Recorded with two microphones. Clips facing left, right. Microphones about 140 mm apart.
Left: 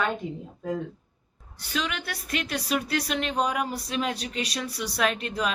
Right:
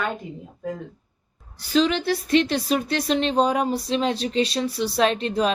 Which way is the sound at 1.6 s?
30° right (ahead or behind).